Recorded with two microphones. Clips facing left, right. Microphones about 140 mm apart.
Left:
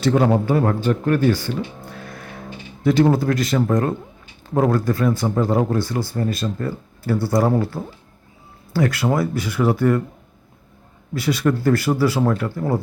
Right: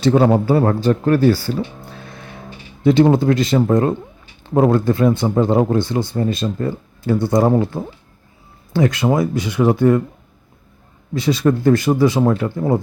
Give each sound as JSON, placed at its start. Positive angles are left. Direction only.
{"t": 0.0, "sound": "a man's voice", "side_deg": -25}
{"t": 11.1, "sound": "speech", "side_deg": -25}